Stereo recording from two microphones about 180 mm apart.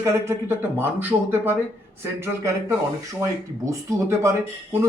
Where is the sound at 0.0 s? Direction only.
15° right (ahead or behind).